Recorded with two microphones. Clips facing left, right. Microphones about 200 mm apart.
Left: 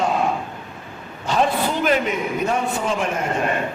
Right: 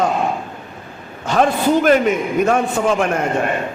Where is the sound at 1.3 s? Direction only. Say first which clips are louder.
Right 6 dB; 50° right (ahead or behind).